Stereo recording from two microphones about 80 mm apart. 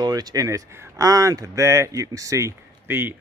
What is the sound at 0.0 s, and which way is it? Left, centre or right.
Speech, right.